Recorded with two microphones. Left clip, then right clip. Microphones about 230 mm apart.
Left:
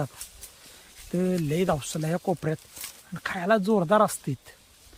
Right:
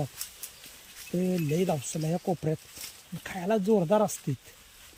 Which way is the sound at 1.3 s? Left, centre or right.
Centre.